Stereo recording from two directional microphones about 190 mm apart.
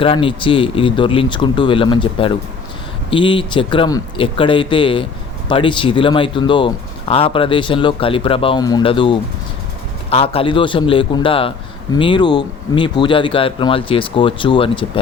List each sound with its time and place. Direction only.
0.0 s speech: 25° left (ahead or behind)